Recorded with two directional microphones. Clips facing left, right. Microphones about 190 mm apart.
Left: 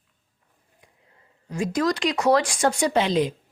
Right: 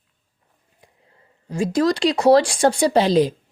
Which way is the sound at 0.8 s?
30° right (ahead or behind).